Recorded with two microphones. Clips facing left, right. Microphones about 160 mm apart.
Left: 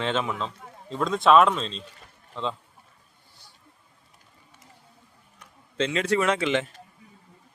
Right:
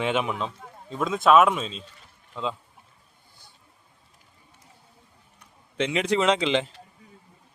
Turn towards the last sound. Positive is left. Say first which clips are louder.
# right 2 dB
turn(degrees=-20)  # may be behind; listen again after turning